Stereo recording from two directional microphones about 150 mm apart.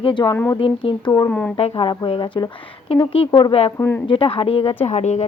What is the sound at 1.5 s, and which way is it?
Speech, 35° left (ahead or behind).